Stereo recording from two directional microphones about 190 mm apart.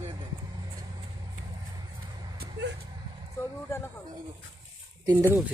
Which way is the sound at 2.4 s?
65° right (ahead or behind).